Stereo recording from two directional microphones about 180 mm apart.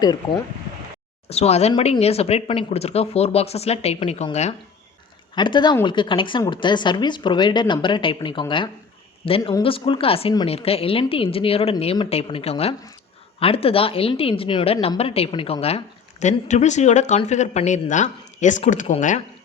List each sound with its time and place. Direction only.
0.0 s speech: 20° left (ahead or behind)
1.3 s speech: 35° left (ahead or behind)
5.3 s speech: 25° left (ahead or behind); by 19.2 s 45° left (ahead or behind)